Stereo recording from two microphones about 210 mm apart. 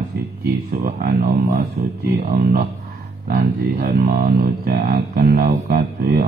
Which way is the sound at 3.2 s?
45° right (ahead or behind).